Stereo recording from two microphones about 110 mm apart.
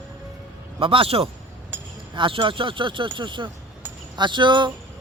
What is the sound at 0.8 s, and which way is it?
Speech, 55° right (ahead or behind).